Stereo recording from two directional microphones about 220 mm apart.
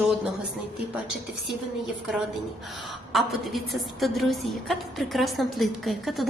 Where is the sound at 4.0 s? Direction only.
Centre (ahead or behind).